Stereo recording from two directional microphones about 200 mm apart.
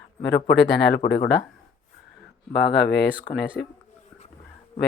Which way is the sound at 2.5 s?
55° left (ahead or behind).